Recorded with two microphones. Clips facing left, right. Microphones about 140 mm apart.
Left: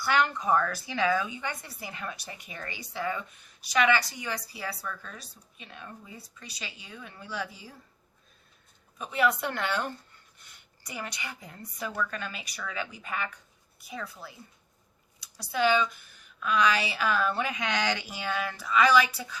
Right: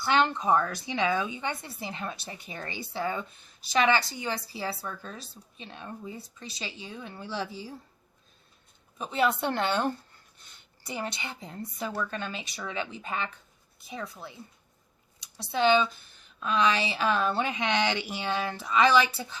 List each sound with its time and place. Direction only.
0.0 s speech: 25° right (ahead or behind)
9.0 s speech: 30° right (ahead or behind)
15.4 s speech: 25° right (ahead or behind)